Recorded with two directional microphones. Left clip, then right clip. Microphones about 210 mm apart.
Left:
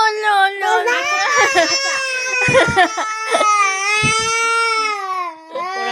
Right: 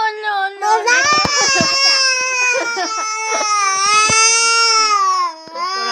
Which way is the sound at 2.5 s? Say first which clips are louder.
Left 5 dB; 25° left (ahead or behind).